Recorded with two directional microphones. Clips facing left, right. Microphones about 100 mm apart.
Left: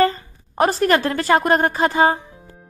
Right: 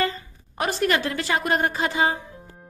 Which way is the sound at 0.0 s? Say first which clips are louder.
Left 8 dB; 40° left (ahead or behind).